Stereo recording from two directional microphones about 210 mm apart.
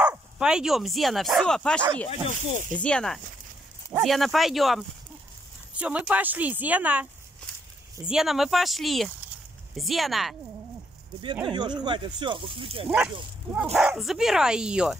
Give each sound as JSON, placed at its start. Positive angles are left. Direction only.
{"t": 0.0, "sound": "speech", "side_deg": -5}
{"t": 2.0, "sound": "speech", "side_deg": 35}
{"t": 2.7, "sound": "speech", "side_deg": 5}
{"t": 11.4, "sound": "speech", "side_deg": -20}
{"t": 13.7, "sound": "speech", "side_deg": 0}